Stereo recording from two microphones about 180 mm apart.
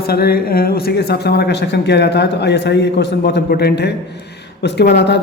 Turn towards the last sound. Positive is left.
turn(degrees=70)  # may be behind; listen again after turning